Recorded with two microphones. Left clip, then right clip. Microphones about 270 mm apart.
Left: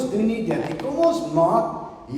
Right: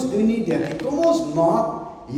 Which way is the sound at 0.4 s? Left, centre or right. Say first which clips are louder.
Right 2 dB; centre.